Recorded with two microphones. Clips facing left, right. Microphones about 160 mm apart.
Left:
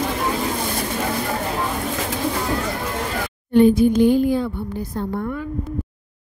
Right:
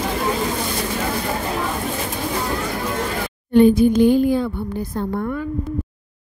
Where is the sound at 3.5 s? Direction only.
75° right (ahead or behind).